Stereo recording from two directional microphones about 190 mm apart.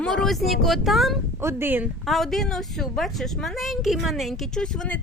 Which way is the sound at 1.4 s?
15° right (ahead or behind).